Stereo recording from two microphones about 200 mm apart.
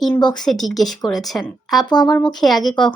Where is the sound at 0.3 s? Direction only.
Centre (ahead or behind).